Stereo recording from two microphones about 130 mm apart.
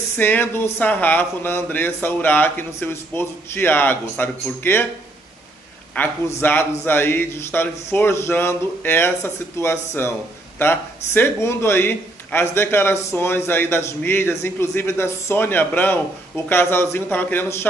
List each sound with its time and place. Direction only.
0.2 s speech: 15° left (ahead or behind)
6.0 s speech: 15° left (ahead or behind)
11.1 s speech: 20° left (ahead or behind)